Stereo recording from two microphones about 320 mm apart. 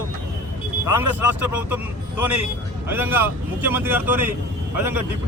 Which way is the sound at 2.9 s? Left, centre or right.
Centre.